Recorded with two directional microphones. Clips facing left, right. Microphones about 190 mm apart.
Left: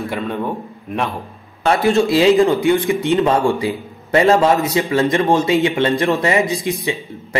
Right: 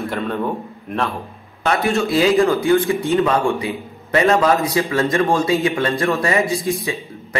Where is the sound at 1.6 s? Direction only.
30° left (ahead or behind).